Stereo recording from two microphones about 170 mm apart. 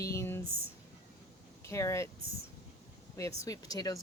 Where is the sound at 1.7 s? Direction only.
15° left (ahead or behind).